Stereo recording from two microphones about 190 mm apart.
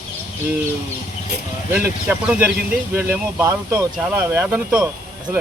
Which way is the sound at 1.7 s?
10° right (ahead or behind).